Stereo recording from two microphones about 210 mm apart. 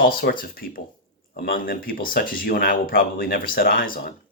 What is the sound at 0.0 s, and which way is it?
Speech, 45° left (ahead or behind).